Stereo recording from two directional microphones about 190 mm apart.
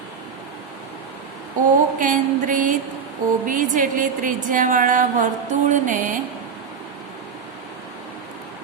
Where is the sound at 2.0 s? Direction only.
45° right (ahead or behind).